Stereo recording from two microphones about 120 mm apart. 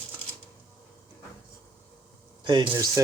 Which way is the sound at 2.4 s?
40° right (ahead or behind).